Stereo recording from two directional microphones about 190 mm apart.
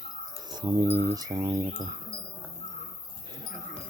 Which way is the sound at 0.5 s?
20° right (ahead or behind).